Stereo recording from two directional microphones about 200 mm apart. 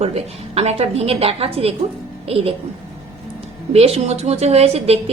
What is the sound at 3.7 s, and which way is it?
A woman's voice, 30° right (ahead or behind).